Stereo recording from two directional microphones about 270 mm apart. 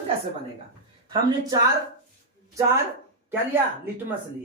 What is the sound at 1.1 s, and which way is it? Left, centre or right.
Speech, centre.